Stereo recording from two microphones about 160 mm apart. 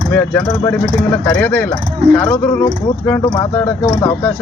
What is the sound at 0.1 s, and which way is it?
Speech, 10° left (ahead or behind).